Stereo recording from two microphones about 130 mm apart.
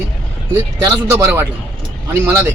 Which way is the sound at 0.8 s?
25° right (ahead or behind).